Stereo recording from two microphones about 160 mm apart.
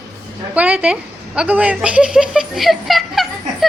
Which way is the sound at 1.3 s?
10° right (ahead or behind).